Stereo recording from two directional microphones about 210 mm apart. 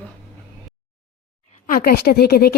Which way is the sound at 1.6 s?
45° left (ahead or behind).